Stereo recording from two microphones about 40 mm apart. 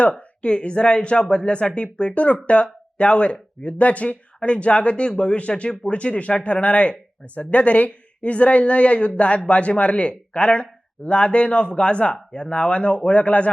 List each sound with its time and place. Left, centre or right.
0.0 s speech: left